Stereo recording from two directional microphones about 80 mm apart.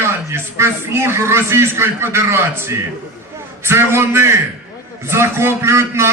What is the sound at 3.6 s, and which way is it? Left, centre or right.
A man's voice, right.